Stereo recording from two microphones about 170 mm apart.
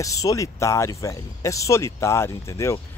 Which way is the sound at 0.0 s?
20° left (ahead or behind).